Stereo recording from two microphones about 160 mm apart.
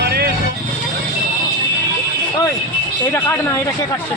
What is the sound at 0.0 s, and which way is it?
Vehicle, 80° right.